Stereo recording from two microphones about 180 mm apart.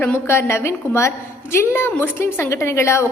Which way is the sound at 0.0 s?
10° left (ahead or behind).